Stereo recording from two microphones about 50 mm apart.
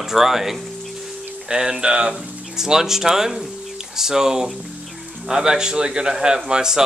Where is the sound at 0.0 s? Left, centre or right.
Centre.